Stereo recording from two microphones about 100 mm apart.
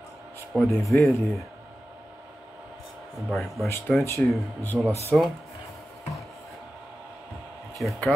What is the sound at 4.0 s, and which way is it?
Speech, 30° left (ahead or behind).